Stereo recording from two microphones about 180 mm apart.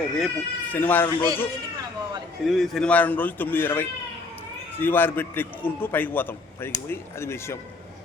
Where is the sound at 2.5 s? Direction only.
Centre (ahead or behind).